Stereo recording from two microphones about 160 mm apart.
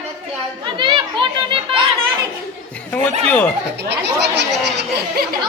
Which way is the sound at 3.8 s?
90° right.